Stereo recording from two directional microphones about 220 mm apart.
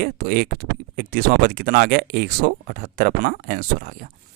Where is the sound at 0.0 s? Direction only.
40° right (ahead or behind).